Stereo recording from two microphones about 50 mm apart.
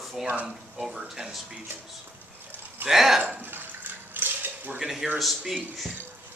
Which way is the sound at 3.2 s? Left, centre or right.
Right.